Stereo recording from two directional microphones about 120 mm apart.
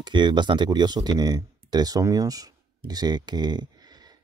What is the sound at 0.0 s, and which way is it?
Speech, 40° right (ahead or behind).